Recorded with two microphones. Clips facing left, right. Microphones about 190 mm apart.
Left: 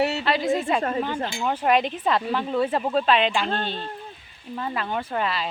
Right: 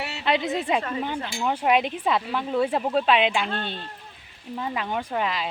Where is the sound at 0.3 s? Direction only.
20° right (ahead or behind).